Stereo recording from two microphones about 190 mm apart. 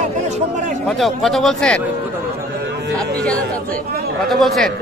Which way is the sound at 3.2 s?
5° left (ahead or behind).